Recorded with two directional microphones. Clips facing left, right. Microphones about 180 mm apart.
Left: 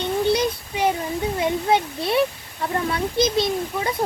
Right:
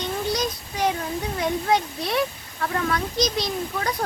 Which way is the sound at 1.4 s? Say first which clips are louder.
Left 1 dB; 25° left (ahead or behind).